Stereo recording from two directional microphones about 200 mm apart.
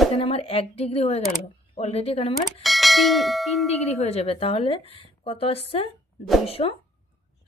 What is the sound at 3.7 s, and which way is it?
Speech, 30° left (ahead or behind).